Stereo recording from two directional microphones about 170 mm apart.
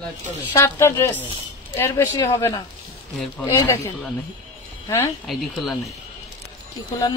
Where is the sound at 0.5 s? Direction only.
15° left (ahead or behind).